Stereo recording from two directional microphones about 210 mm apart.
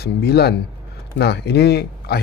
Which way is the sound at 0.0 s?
50° left (ahead or behind).